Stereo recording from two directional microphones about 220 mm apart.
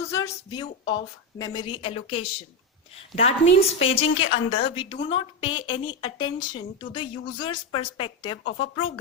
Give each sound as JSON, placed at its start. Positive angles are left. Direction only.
{"t": 0.1, "sound": "a woman's voice", "side_deg": 15}